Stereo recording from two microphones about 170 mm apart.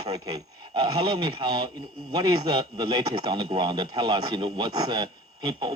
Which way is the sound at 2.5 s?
25° right (ahead or behind).